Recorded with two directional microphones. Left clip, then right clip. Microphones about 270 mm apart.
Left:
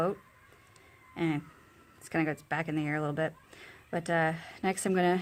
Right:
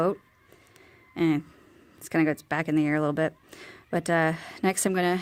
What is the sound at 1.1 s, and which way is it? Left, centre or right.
Speech, right.